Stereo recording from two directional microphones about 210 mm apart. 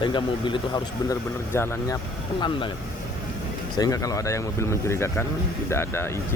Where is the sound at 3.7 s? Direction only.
15° left (ahead or behind).